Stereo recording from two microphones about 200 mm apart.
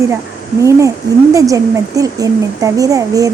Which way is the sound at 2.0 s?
15° right (ahead or behind).